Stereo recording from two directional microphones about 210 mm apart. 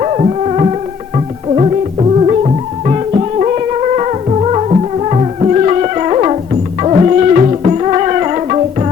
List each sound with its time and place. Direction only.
0.0 s music: 30° right (ahead or behind)